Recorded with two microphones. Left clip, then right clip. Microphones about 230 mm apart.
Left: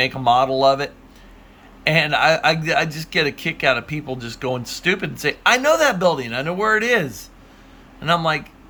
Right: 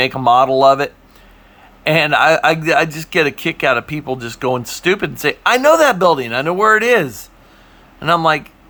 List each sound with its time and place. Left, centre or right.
0.0 s a man's voice: right